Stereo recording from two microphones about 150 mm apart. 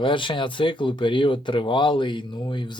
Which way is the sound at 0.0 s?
35° left (ahead or behind).